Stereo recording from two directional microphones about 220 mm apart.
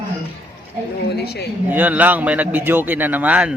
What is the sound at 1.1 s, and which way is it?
Speech, 45° left (ahead or behind).